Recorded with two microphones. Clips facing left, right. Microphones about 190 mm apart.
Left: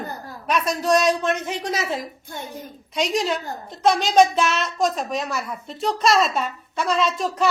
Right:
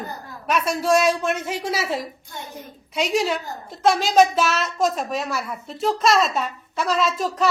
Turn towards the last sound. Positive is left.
turn(degrees=0)  # may be behind; listen again after turning